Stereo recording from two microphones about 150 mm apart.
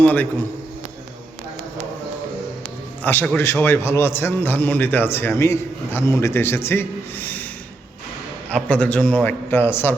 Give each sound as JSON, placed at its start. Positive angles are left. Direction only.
{"t": 0.0, "sound": "a man's voice", "side_deg": 10}
{"t": 3.0, "sound": "a man's voice", "side_deg": 10}
{"t": 8.4, "sound": "a man's voice", "side_deg": 10}